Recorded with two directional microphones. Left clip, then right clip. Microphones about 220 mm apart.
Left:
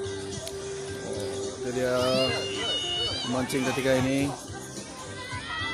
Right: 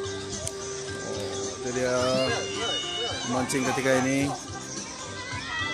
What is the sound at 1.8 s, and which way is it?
Speech, centre (ahead or behind).